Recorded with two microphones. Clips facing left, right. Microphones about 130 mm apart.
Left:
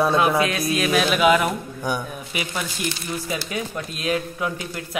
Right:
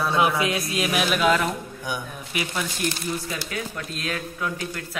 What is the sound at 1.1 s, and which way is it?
Speech, 10° left (ahead or behind).